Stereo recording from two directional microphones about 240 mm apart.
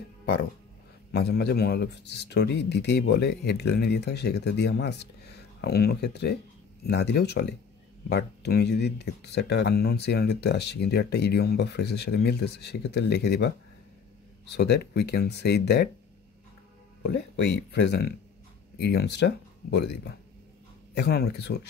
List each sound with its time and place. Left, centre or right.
1.1 s speech: left
17.0 s speech: left